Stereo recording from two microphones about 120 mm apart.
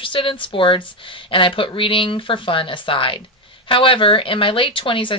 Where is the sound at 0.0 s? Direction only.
45° left (ahead or behind).